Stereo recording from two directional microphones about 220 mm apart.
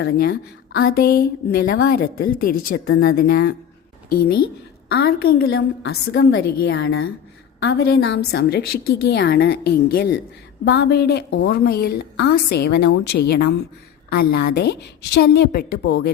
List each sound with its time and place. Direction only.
0.0 s a woman's voice: 45° left (ahead or behind)
4.9 s a woman's voice: 45° left (ahead or behind)